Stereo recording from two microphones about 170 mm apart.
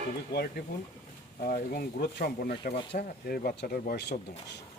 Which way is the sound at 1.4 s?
60° left (ahead or behind).